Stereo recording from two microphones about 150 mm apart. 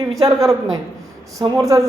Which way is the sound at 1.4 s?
30° right (ahead or behind).